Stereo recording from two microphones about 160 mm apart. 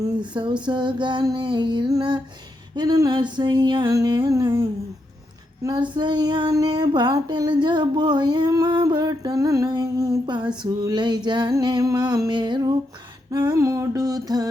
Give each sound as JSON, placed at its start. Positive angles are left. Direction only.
{"t": 0.0, "sound": "female singing", "side_deg": -30}
{"t": 5.6, "sound": "female singing", "side_deg": -30}